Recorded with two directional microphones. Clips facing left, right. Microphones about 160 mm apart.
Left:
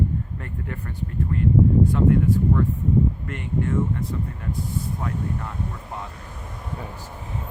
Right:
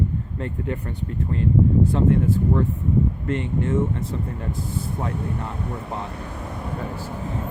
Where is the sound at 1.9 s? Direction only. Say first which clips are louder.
Even; 25° right (ahead or behind).